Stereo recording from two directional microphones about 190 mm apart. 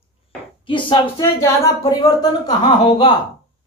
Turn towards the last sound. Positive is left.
turn(degrees=20)  # may be behind; listen again after turning